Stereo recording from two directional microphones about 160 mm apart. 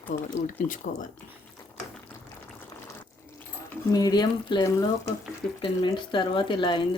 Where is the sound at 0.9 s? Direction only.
60° left (ahead or behind).